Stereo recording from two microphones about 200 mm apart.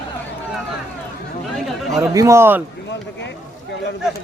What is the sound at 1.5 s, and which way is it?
Chatter, centre (ahead or behind).